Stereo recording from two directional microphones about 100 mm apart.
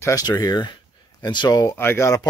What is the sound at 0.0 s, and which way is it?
Speech, 40° left (ahead or behind).